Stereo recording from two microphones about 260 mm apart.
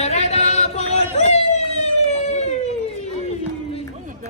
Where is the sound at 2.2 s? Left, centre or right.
Left.